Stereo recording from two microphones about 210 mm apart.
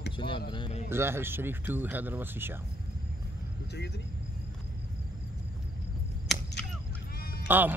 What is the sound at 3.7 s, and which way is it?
Speech, 55° left (ahead or behind).